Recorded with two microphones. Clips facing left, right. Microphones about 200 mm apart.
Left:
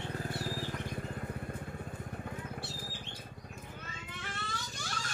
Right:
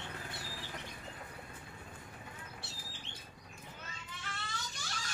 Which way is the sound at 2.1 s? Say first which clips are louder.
Left 9 dB; 50° left (ahead or behind).